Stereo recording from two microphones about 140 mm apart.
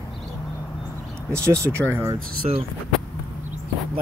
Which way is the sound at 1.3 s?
20° right (ahead or behind).